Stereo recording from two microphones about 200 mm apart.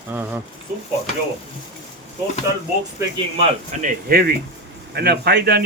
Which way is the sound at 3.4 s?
40° right (ahead or behind).